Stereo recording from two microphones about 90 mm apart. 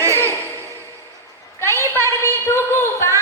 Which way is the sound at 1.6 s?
30° left (ahead or behind).